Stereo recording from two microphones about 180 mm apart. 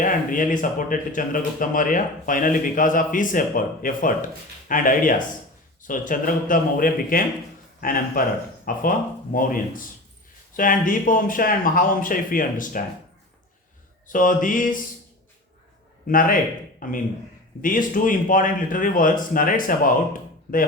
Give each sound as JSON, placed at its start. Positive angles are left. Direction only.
{"t": 0.0, "sound": "speech", "side_deg": 45}
{"t": 14.1, "sound": "speech", "side_deg": 50}
{"t": 16.0, "sound": "speech", "side_deg": 50}